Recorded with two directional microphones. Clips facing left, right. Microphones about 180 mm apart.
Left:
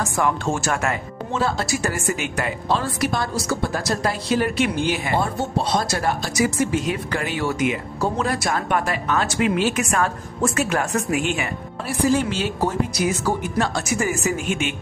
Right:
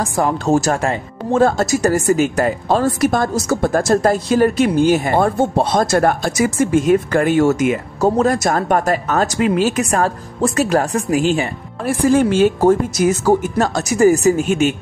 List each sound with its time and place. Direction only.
0.0 s speech: 35° right (ahead or behind)
1.3 s speech: 50° right (ahead or behind)
11.8 s speech: 50° right (ahead or behind)